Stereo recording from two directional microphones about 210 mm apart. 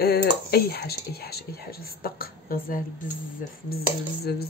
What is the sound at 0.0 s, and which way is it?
Speech, 50° left (ahead or behind).